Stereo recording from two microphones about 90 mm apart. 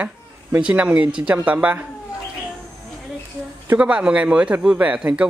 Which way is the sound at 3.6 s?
15° right (ahead or behind).